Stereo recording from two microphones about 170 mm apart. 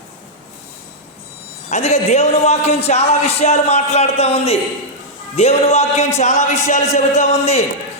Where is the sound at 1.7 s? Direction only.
40° left (ahead or behind).